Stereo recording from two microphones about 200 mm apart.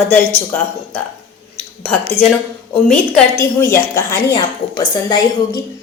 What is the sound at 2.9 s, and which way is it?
A woman's voice, 5° left (ahead or behind).